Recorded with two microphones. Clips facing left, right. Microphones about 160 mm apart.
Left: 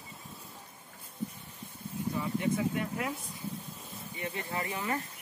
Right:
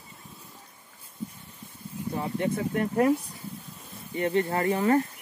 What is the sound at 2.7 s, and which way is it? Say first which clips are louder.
Speech: right 11 dB; 50° right (ahead or behind).